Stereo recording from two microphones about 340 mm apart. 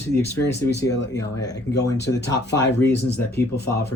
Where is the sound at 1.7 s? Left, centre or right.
Left.